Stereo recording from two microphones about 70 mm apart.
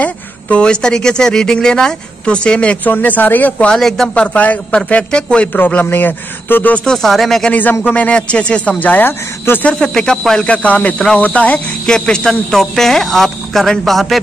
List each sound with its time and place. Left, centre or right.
0.0 s speech: centre
3.7 s speech: centre
4.2 s speech: left
5.5 s speech: left
6.8 s speech: centre
7.8 s speech: left
9.7 s speech: centre
10.5 s speech: centre